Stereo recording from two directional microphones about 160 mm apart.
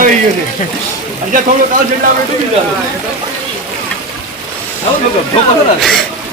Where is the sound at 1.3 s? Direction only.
55° right (ahead or behind).